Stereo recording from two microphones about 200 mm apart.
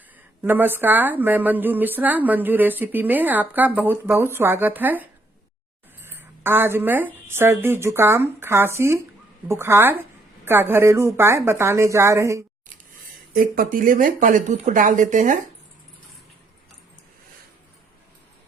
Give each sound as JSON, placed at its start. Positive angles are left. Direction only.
{"t": 0.4, "sound": "speech", "side_deg": -10}
{"t": 6.1, "sound": "speech", "side_deg": -10}
{"t": 13.3, "sound": "speech", "side_deg": -45}